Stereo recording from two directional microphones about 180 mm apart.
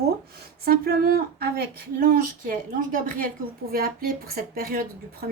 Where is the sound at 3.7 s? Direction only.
55° right (ahead or behind).